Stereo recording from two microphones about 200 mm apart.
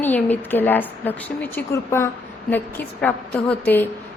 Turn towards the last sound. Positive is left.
turn(degrees=10)  # may be behind; listen again after turning